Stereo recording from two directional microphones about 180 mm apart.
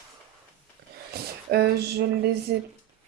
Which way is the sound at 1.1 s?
60° right (ahead or behind).